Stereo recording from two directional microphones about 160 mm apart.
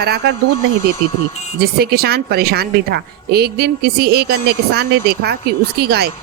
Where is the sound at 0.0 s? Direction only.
80° right.